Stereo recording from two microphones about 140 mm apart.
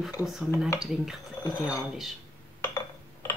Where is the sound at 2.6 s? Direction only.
20° left (ahead or behind).